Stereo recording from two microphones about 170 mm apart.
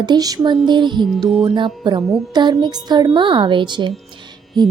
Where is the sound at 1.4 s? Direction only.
30° right (ahead or behind).